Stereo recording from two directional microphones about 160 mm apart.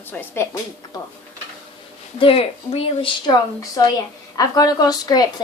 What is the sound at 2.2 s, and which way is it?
Speech, 35° left (ahead or behind).